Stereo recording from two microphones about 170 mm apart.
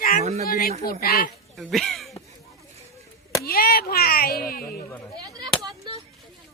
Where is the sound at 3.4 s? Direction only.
60° left (ahead or behind).